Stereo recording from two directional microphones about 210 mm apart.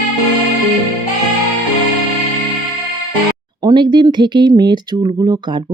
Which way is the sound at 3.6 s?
20° right (ahead or behind).